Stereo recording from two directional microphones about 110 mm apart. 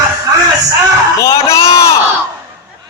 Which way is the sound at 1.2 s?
25° left (ahead or behind).